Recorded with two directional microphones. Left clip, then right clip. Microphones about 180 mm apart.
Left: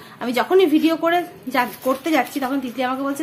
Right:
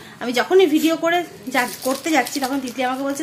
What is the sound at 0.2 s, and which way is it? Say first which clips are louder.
Speech: right 1 dB; 10° left (ahead or behind).